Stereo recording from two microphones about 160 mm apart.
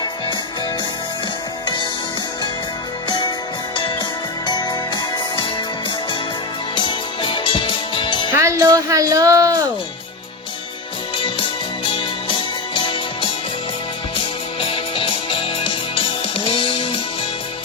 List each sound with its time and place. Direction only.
1.6 s music: 30° left (ahead or behind)
3.1 s music: 25° left (ahead or behind)
6.7 s music: 30° left (ahead or behind)
8.3 s music: 15° right (ahead or behind)
11.2 s music: 35° left (ahead or behind)
14.6 s music: 30° left (ahead or behind)